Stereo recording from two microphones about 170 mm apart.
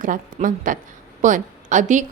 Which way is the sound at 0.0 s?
50° right (ahead or behind).